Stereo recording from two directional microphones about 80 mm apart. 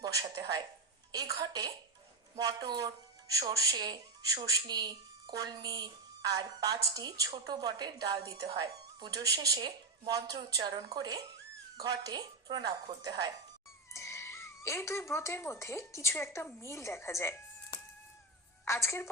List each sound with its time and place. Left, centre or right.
0.0 s a woman's voice: right
3.3 s a woman's voice: right
8.4 s a woman's voice: right
11.8 s a woman's voice: right
13.9 s speech: left
18.6 s a woman's voice: left